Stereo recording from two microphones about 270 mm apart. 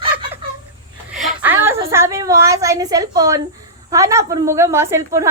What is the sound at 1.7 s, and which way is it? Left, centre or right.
A woman's voice, centre.